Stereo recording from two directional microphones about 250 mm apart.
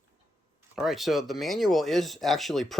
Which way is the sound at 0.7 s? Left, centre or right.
Centre.